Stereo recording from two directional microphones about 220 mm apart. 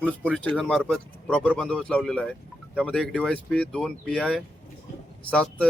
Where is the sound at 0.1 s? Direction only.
5° right (ahead or behind).